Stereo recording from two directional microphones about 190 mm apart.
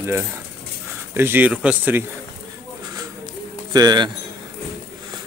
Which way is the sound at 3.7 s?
20° right (ahead or behind).